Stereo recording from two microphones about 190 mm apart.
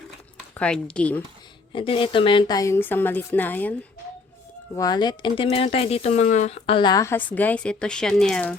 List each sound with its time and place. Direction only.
0.5 s a woman's voice: 5° left (ahead or behind)
1.7 s a woman's voice: 25° left (ahead or behind); by 3.8 s 10° left (ahead or behind)
4.8 s speech: 20° left (ahead or behind); by 8.5 s 5° left (ahead or behind)